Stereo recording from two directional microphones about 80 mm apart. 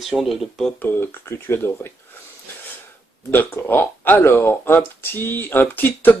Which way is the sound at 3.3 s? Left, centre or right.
Left.